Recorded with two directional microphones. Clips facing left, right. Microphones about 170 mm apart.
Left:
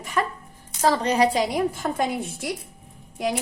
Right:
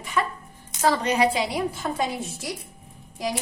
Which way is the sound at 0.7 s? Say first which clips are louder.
Left 1 dB; 35° left (ahead or behind).